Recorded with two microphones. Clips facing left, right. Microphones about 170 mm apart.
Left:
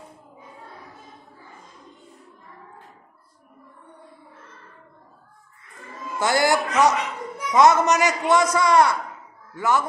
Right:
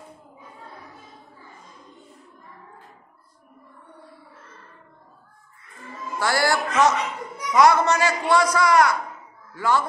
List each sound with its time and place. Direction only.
6.1 s a man's voice: 20° left (ahead or behind)